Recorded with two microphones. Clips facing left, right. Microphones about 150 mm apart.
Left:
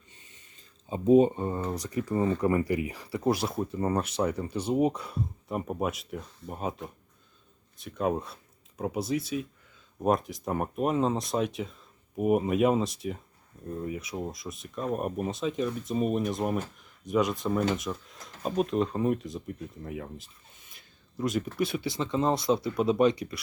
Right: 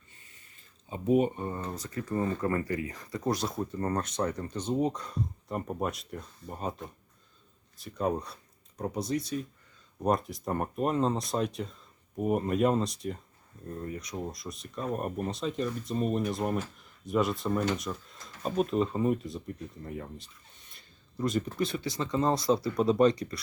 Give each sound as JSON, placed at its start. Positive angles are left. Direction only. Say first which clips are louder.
{"t": 0.1, "sound": "speech", "louder": "left 3 dB", "side_deg": 20}
{"t": 21.8, "sound": "speech", "louder": "left 1 dB", "side_deg": 20}
{"t": 22.6, "sound": "speech", "louder": "right 1 dB", "side_deg": 5}